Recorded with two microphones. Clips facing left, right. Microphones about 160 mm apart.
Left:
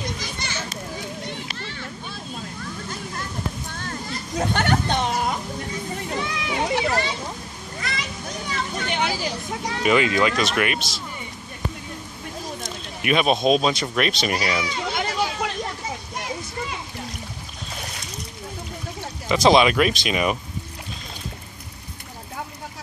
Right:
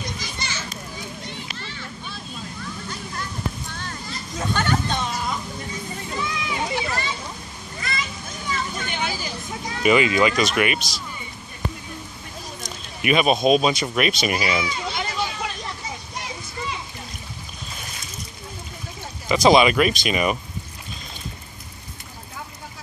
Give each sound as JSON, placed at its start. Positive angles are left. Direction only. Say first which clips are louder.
{"t": 0.2, "sound": "children playing", "louder": "left 1 dB", "side_deg": 55}
{"t": 3.7, "sound": "children playing", "louder": "left 2 dB", "side_deg": 50}
{"t": 7.8, "sound": "a sound", "louder": "even", "side_deg": 70}
{"t": 9.8, "sound": "speech", "louder": "right 2 dB", "side_deg": -5}
{"t": 13.0, "sound": "speech", "louder": "right 1 dB", "side_deg": -5}
{"t": 14.9, "sound": "children playing", "louder": "left 3 dB", "side_deg": 65}
{"t": 16.2, "sound": "a sound", "louder": "left 3 dB", "side_deg": 50}
{"t": 19.2, "sound": "speech", "louder": "right 1 dB", "side_deg": 0}